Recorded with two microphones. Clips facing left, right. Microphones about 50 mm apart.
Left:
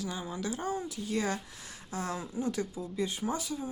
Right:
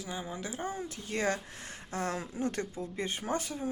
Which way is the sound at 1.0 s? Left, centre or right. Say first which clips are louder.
Even; right.